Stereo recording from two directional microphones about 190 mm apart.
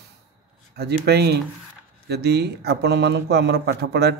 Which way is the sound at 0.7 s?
60° right (ahead or behind).